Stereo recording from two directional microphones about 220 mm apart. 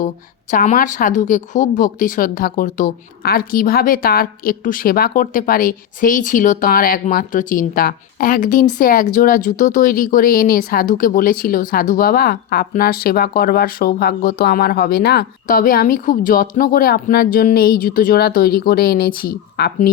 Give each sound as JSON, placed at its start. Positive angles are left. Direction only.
{"t": 0.5, "sound": "a woman's voice", "side_deg": 35}